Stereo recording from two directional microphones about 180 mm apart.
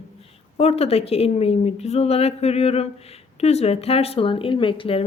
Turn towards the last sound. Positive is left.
turn(degrees=30)  # may be behind; listen again after turning